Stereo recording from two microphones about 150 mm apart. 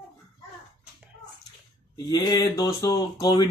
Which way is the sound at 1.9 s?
25° left (ahead or behind).